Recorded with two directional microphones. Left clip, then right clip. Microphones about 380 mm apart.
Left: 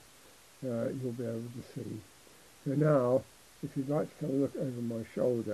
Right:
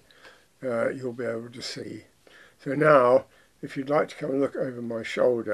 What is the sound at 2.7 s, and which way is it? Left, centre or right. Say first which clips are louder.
Speech: right 10 dB; centre.